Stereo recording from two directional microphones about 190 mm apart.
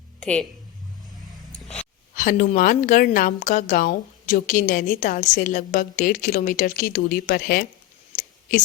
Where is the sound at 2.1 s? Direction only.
45° left (ahead or behind).